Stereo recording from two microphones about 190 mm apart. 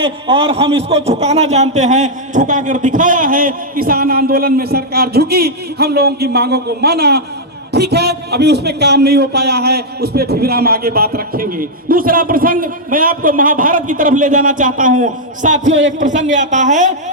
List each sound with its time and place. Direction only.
0.0 s a man's voice: 30° right (ahead or behind)
15.7 s a man's voice: 80° right
16.0 s a man's voice: 40° right (ahead or behind)